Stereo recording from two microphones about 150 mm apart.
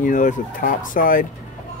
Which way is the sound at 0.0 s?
60° left (ahead or behind).